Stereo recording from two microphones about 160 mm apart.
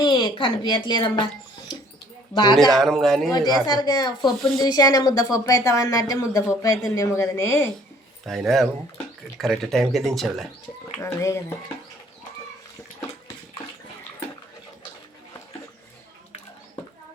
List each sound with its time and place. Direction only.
0.0 s a woman's voice: 30° left (ahead or behind)
2.6 s speech: centre (ahead or behind)
3.7 s a woman's voice: 25° left (ahead or behind)
8.2 s speech: centre (ahead or behind)
11.0 s speech: 15° left (ahead or behind)